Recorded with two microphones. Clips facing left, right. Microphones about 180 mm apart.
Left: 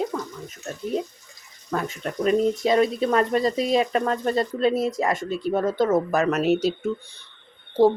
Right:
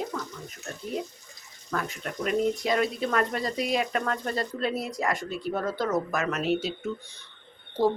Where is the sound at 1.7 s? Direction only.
25° left (ahead or behind).